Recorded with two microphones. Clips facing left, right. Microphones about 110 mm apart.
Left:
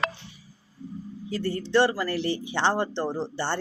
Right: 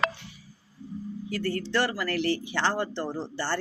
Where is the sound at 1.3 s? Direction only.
25° left (ahead or behind).